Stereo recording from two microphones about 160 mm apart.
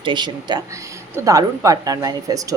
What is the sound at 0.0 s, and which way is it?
Speech, 30° right (ahead or behind).